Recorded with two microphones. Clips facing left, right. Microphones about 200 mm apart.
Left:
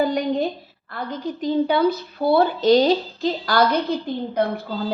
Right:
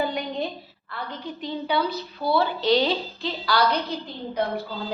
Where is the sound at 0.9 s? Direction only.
45° left (ahead or behind).